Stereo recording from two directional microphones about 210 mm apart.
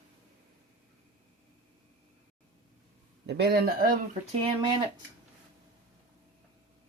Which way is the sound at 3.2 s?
50° right (ahead or behind).